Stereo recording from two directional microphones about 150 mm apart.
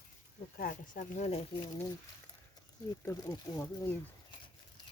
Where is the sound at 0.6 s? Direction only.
65° left (ahead or behind); by 1.4 s 50° left (ahead or behind).